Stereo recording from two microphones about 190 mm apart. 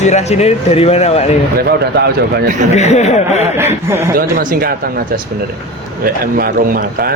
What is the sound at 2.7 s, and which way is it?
Speech, 35° left (ahead or behind).